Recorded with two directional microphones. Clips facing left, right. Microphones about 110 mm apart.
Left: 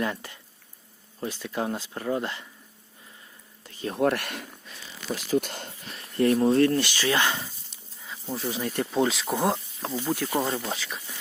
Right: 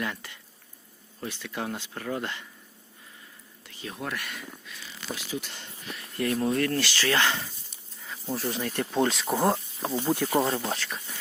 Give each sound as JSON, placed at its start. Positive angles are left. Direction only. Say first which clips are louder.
{"t": 0.0, "sound": "speech", "louder": "left 4 dB", "side_deg": 30}
{"t": 3.6, "sound": "a sound", "louder": "left 7 dB", "side_deg": 40}
{"t": 3.9, "sound": "speech", "louder": "left 11 dB", "side_deg": 60}
{"t": 4.6, "sound": "speech", "louder": "left 2 dB", "side_deg": 40}
{"t": 8.0, "sound": "snake", "louder": "even", "side_deg": 0}
{"t": 8.6, "sound": "speech", "louder": "left 2 dB", "side_deg": 15}
{"t": 8.9, "sound": "speech", "louder": "even", "side_deg": 5}
{"t": 10.0, "sound": "speech", "louder": "right 2 dB", "side_deg": -15}
{"t": 10.7, "sound": "speech", "louder": "right 1 dB", "side_deg": 0}